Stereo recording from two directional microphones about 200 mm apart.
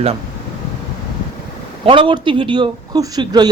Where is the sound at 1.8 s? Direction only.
25° right (ahead or behind).